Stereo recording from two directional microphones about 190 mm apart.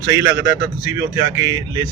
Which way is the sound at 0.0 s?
15° right (ahead or behind).